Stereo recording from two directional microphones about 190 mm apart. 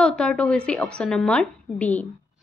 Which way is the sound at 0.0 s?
5° left (ahead or behind).